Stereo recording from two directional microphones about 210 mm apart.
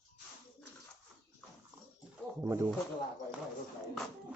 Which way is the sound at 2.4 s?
15° right (ahead or behind).